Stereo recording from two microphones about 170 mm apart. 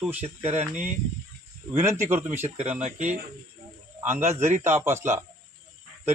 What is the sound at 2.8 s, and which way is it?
Speech, 45° right (ahead or behind).